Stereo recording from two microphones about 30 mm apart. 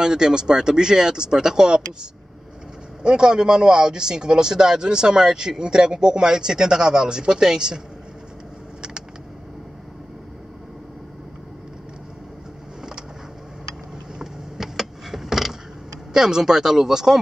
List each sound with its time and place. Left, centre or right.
0.0 s speech: right
3.0 s speech: right
14.1 s vehicle: centre
16.1 s speech: centre